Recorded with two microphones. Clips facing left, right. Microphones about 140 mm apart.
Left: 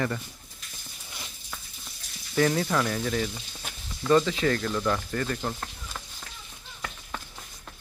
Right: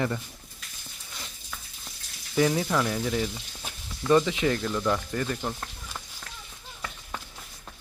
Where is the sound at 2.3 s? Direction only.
10° right (ahead or behind).